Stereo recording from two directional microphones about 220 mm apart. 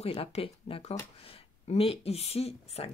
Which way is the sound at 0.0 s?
25° left (ahead or behind).